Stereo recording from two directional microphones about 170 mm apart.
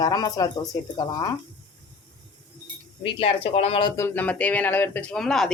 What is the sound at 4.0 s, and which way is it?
Speech, 10° left (ahead or behind).